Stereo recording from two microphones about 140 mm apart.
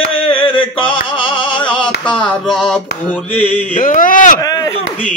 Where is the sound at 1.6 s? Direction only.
10° left (ahead or behind).